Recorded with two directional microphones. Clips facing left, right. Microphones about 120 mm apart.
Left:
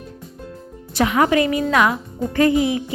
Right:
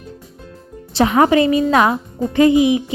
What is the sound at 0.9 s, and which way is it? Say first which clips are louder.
A woman's voice: right 4 dB; 30° right (ahead or behind).